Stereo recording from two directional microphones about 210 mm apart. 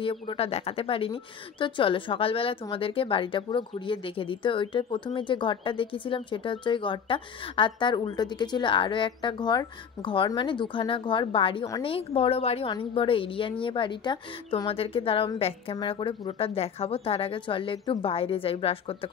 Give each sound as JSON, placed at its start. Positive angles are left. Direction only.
{"t": 0.0, "sound": "speech", "side_deg": 25}